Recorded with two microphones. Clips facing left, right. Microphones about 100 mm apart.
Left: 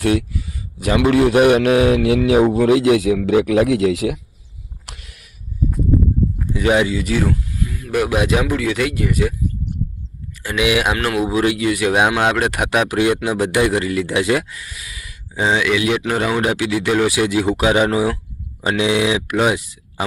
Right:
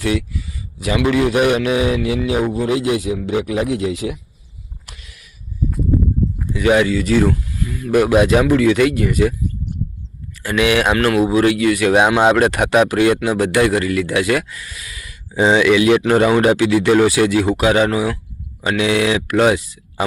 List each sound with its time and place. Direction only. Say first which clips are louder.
0.0 s a man's voice: left 2 dB; 50° left (ahead or behind); by 2.8 s 70° left (ahead or behind)
2.9 s speech: left 5 dB; 85° left
4.9 s a sound: left 4 dB; 60° left (ahead or behind)
6.7 s speech: right 2 dB; 20° left (ahead or behind); by 9.3 s centre (ahead or behind)
10.4 s speech: right 2 dB; 10° left (ahead or behind)
11.9 s speech: right 3 dB; 10° left (ahead or behind)
12.9 s speech: right 2 dB; 15° left (ahead or behind)
14.5 s speech: right 1 dB; 10° left (ahead or behind)
15.4 s speech: right 5 dB; centre (ahead or behind)